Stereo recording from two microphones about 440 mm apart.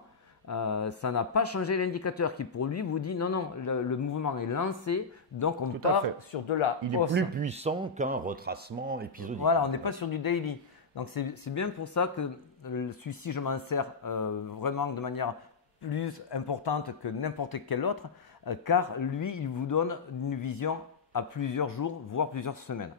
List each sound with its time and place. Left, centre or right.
0.5 s speech: left
6.3 s speech: left
7.2 s speech: centre
9.4 s speech: left
11.4 s speech: left
16.1 s speech: left